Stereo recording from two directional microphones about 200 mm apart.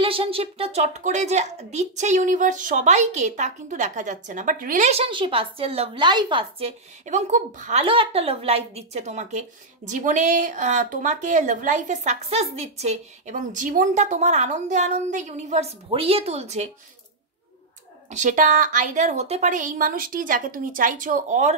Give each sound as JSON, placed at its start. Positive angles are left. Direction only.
{"t": 0.0, "sound": "speech", "side_deg": -25}
{"t": 7.8, "sound": "speech", "side_deg": -25}
{"t": 18.1, "sound": "speech", "side_deg": -40}